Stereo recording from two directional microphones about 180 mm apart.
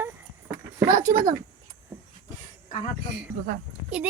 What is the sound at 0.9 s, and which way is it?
Speech, 45° right (ahead or behind).